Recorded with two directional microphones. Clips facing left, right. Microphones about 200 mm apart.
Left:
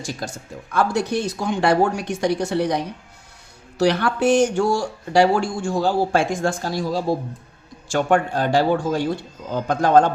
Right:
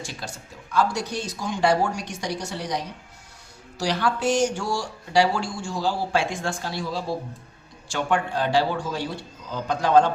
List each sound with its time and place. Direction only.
0.0 s speech: 45° left (ahead or behind)
0.7 s speech: 55° left (ahead or behind)